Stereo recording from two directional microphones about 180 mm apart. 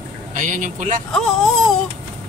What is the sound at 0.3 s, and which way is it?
Speech, 45° right (ahead or behind).